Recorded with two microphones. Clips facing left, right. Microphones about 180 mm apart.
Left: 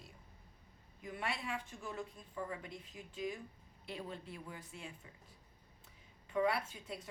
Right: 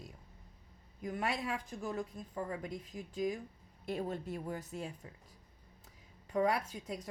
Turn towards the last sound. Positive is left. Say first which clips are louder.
# right 5 dB
turn(degrees=-40)  # may be behind; listen again after turning